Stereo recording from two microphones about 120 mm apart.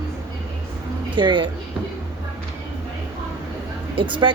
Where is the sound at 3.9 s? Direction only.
45° right (ahead or behind).